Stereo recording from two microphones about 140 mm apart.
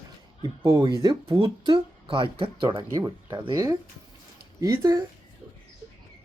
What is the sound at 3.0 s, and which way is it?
Speech, 15° right (ahead or behind).